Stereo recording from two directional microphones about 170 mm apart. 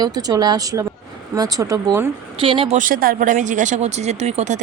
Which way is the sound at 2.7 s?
55° right (ahead or behind).